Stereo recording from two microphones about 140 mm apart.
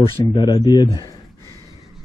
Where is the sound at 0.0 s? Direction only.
30° left (ahead or behind).